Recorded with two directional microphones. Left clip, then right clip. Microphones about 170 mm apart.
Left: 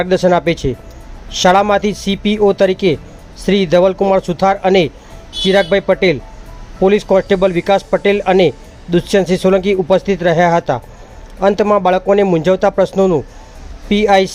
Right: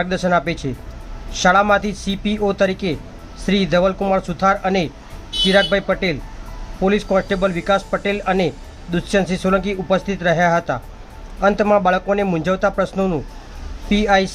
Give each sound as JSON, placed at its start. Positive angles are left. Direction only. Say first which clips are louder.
{"t": 0.0, "sound": "speech", "louder": "left 6 dB", "side_deg": 35}